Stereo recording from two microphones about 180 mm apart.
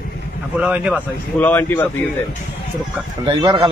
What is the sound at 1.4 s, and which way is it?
Speech, 10° left (ahead or behind).